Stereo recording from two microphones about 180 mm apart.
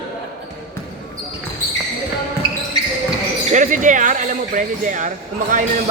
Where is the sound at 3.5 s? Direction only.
45° right (ahead or behind).